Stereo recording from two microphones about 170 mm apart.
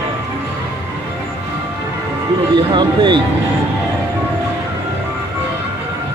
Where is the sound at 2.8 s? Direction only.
30° right (ahead or behind).